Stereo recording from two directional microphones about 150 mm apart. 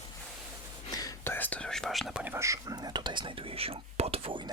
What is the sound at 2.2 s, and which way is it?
Whispering, 15° right (ahead or behind).